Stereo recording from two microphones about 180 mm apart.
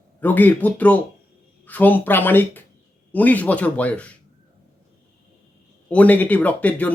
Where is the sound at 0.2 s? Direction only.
10° left (ahead or behind).